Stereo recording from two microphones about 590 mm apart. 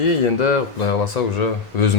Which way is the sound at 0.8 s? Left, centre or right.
Left.